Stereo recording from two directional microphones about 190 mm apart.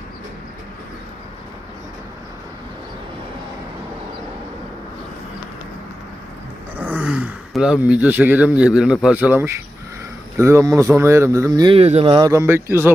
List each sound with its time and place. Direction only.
6.8 s speech: 5° right (ahead or behind); by 12.3 s 25° right (ahead or behind)
12.3 s speech: 15° right (ahead or behind)